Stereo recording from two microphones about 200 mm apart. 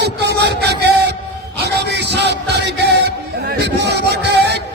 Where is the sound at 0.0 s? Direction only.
55° right (ahead or behind).